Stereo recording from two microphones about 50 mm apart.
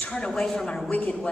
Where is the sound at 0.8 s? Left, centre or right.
Left.